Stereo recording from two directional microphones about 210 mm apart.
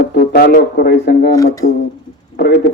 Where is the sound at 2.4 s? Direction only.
55° left (ahead or behind).